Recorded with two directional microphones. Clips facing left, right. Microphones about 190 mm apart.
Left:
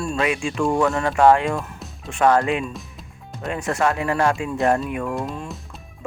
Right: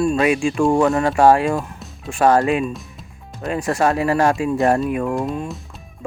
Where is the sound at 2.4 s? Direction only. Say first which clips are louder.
Right 3 dB; 20° right (ahead or behind).